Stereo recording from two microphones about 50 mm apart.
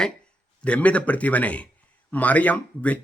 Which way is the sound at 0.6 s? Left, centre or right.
Left.